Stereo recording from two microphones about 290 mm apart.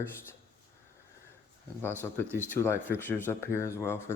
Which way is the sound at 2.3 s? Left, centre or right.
Centre.